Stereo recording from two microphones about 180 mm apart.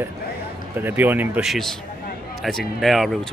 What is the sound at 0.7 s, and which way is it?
A man's voice, 10° right (ahead or behind).